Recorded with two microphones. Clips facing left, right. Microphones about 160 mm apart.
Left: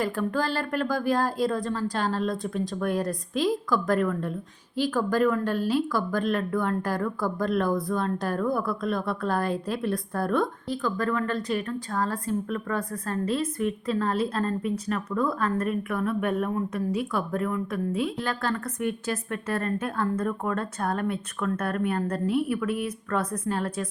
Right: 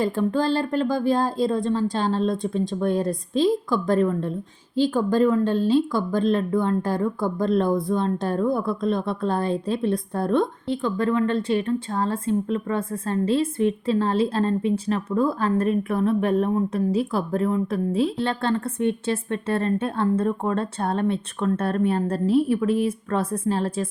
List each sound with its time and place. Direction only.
0.0 s speech: 25° right (ahead or behind)